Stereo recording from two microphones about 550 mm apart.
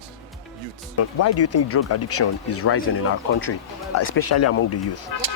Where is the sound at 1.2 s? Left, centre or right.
Left.